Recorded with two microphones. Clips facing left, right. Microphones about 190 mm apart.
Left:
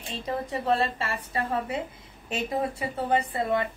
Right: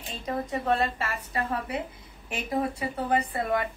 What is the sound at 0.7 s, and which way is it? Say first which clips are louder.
Speech: left 2 dB; 30° left (ahead or behind).